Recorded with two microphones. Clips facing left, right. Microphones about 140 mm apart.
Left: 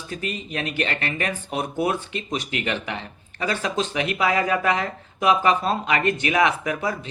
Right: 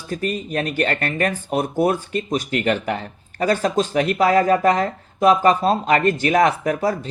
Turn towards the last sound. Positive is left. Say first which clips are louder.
# right 5 dB
turn(degrees=-40)  # may be behind; listen again after turning